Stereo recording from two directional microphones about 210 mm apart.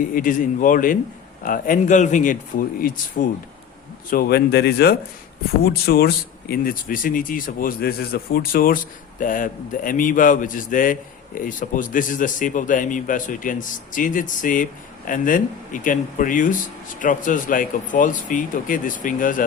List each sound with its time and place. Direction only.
0.1 s speech: 40° left (ahead or behind)